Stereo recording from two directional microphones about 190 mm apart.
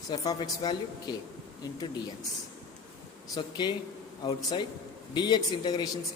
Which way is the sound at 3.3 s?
25° left (ahead or behind).